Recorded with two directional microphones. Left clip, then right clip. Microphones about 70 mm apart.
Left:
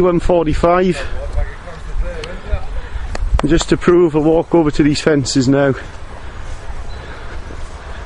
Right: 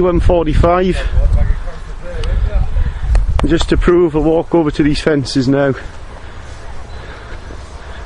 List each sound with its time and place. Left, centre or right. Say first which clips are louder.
0.0 s a man's voice: even; centre
1.0 s a sound: right 1 dB; centre
3.4 s a man's voice: even; left
4.6 s speech: even; left